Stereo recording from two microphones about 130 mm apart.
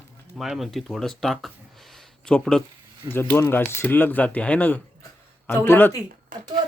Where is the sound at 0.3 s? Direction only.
Centre (ahead or behind).